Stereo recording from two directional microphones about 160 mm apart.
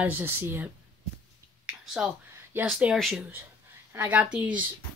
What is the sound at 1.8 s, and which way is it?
A woman's voice, 5° right (ahead or behind).